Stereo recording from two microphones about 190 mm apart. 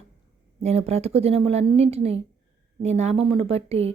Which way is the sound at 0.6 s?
35° right (ahead or behind).